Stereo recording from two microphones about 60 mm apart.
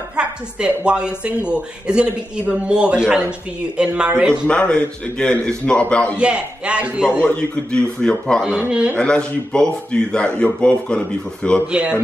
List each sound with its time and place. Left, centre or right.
0.1 s speech: centre
4.5 s a man's voice: left
6.1 s speech: centre
7.3 s speech: centre
8.5 s speech: centre
8.9 s speech: centre
11.6 s speech: centre